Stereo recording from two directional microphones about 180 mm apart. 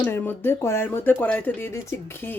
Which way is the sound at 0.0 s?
10° left (ahead or behind).